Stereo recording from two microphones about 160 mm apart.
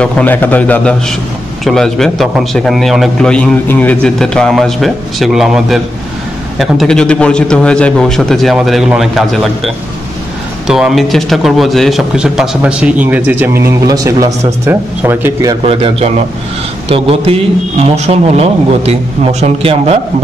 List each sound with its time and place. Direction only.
0.0 s a man's voice: 10° left (ahead or behind)
10.7 s a man's voice: 5° right (ahead or behind)
15.6 s a man's voice: 35° right (ahead or behind)